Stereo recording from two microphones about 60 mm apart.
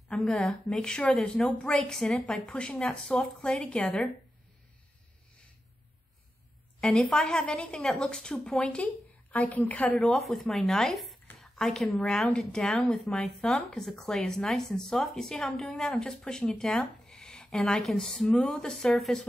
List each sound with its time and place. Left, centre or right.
0.3 s a woman's voice: centre
1.6 s a woman's voice: centre
2.4 s a woman's voice: centre
3.6 s a woman's voice: left
7.0 s a woman's voice: centre
7.7 s a woman's voice: centre
9.3 s a woman's voice: left
10.0 s a woman's voice: centre